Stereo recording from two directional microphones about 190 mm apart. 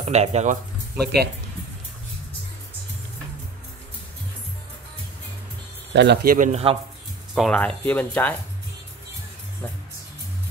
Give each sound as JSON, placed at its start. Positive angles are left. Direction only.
{"t": 0.0, "sound": "speech", "side_deg": -35}
{"t": 1.0, "sound": "speech", "side_deg": -60}
{"t": 5.9, "sound": "speech", "side_deg": -60}
{"t": 6.3, "sound": "speech", "side_deg": -45}
{"t": 7.3, "sound": "speech", "side_deg": 5}